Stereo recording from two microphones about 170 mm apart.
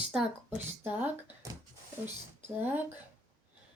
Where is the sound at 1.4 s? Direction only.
20° right (ahead or behind).